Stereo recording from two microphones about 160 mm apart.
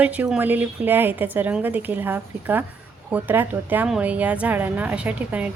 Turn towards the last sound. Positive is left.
turn(degrees=-10)  # may be behind; listen again after turning